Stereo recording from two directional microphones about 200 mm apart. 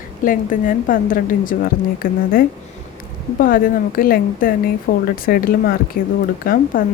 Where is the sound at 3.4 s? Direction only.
45° left (ahead or behind).